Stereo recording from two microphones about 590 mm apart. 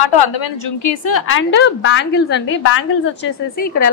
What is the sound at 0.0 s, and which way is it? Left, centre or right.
A woman's voice, left.